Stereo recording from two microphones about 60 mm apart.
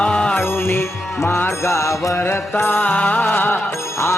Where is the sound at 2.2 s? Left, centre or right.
Left.